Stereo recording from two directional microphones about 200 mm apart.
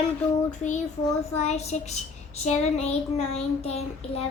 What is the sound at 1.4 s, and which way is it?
A child's voice, 35° left (ahead or behind).